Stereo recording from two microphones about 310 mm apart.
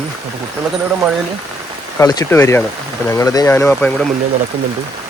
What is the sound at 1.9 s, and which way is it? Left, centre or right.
Speech, centre.